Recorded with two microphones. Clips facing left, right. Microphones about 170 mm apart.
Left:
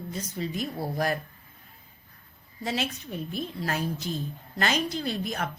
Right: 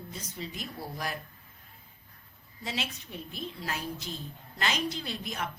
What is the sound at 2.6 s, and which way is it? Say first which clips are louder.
A woman's voice: left 6 dB; 45° left (ahead or behind).